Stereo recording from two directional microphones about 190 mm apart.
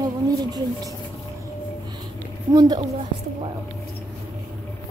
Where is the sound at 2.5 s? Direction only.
20° right (ahead or behind).